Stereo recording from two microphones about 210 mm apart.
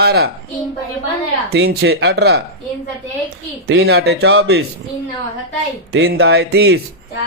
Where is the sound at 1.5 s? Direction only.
50° right (ahead or behind).